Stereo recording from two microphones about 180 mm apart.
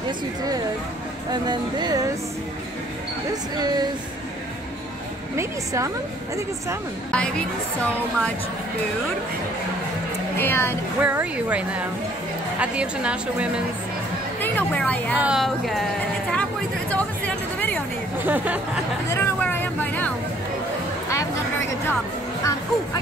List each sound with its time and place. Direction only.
1.3 s speech: 25° right (ahead or behind)
3.5 s speech: 20° right (ahead or behind)
5.3 s speech: 15° right (ahead or behind)
7.1 s speech: 5° left (ahead or behind)
10.4 s speech: 10° left (ahead or behind)
11.0 s speech: 10° right (ahead or behind)
14.4 s speech: 10° left (ahead or behind)
15.1 s speech: 5° right (ahead or behind)
17.6 s a sound: 10° left (ahead or behind)
18.2 s speech: 10° right (ahead or behind)
19.1 s a sound: 10° left (ahead or behind)